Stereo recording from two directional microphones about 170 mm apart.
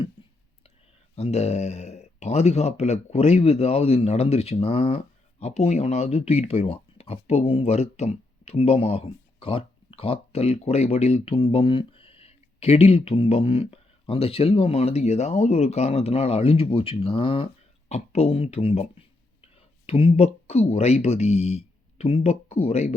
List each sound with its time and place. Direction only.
1.1 s speech: 40° left (ahead or behind)
19.9 s speech: 35° left (ahead or behind)